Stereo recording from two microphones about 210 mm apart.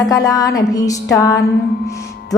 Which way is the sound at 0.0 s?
15° left (ahead or behind).